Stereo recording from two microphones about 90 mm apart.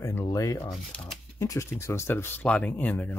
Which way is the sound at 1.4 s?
35° left (ahead or behind).